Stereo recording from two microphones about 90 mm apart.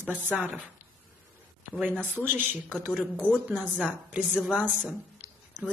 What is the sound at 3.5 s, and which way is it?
A woman's voice, 5° right (ahead or behind).